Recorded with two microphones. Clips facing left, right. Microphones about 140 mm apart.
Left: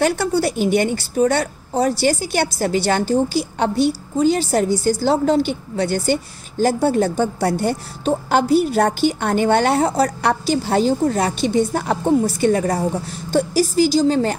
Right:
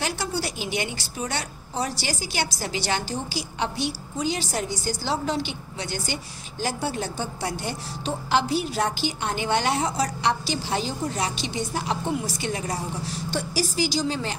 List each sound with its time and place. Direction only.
0.0 s a woman's voice: 55° left (ahead or behind)